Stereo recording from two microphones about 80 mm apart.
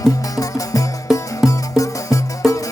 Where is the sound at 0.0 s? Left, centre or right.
Left.